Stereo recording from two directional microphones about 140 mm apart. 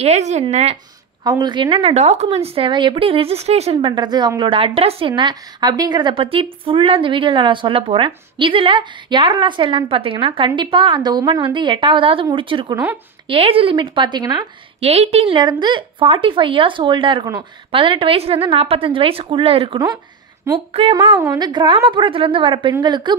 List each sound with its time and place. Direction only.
0.0 s speech: 55° right (ahead or behind)
1.2 s a woman's voice: 30° right (ahead or behind); by 3.9 s 50° right (ahead or behind)
3.9 s a woman's voice: 30° right (ahead or behind)
14.8 s a woman's voice: 45° right (ahead or behind)